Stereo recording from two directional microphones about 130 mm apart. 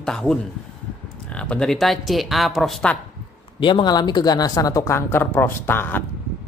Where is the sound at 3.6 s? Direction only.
40° left (ahead or behind); by 6.0 s 15° left (ahead or behind).